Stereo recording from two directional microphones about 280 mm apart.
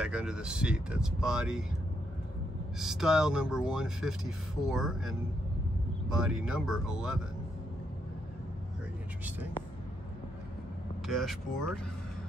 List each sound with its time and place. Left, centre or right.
0.0 s speech: centre
2.8 s speech: centre
11.1 s speech: centre